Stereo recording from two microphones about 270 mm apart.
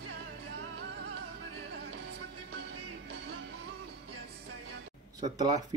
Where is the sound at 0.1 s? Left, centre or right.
Right.